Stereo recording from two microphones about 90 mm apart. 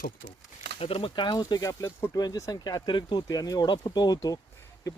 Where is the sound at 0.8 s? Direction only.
85° left.